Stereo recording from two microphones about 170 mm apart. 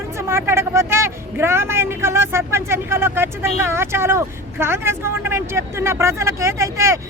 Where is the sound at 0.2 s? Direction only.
15° right (ahead or behind).